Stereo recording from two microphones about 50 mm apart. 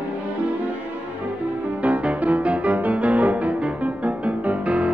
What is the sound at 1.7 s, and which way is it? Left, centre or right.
Music, right.